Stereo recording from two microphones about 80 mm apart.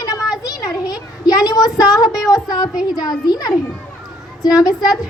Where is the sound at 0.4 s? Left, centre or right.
Left.